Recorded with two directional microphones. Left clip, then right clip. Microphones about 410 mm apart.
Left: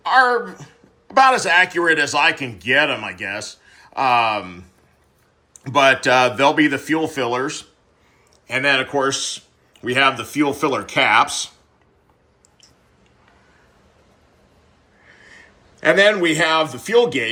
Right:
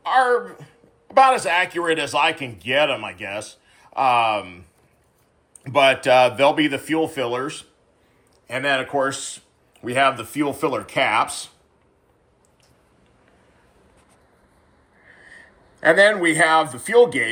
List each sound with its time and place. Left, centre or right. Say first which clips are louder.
0.0 s a man's voice: left 3 dB; centre
5.7 s a man's voice: left 1 dB; centre
15.1 s a man's voice: even; centre